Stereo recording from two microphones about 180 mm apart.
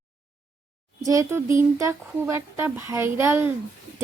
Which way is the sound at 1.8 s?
15° right (ahead or behind).